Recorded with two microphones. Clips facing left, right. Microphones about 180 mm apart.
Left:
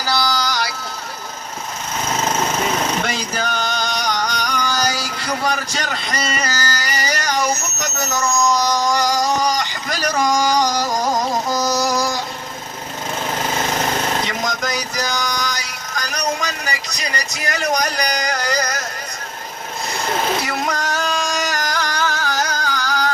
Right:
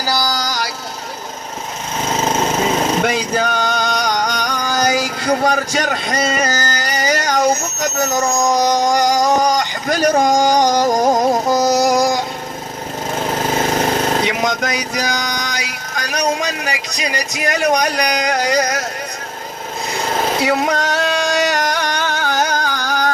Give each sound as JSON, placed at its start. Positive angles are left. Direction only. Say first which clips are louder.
{"t": 0.0, "sound": "vehicle", "louder": "right 1 dB", "side_deg": -40}
{"t": 2.0, "sound": "jackhammer", "louder": "right 3 dB", "side_deg": -25}
{"t": 3.0, "sound": "a sound", "louder": "right 6 dB", "side_deg": -50}
{"t": 8.4, "sound": "speech", "louder": "right 3 dB", "side_deg": -50}
{"t": 13.2, "sound": "lawn mower", "louder": "right 4 dB", "side_deg": -35}
{"t": 14.3, "sound": "vehicle", "louder": "right 5 dB", "side_deg": -55}
{"t": 16.0, "sound": "speech", "louder": "right 4 dB", "side_deg": -55}
{"t": 20.4, "sound": "speech", "louder": "right 6 dB", "side_deg": -65}
{"t": 21.5, "sound": "carnatic music", "louder": "right 4 dB", "side_deg": -65}